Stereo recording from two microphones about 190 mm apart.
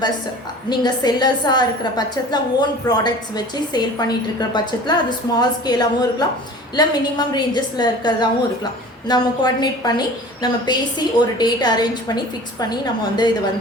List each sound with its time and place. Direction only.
0.7 s a woman's voice: 20° left (ahead or behind)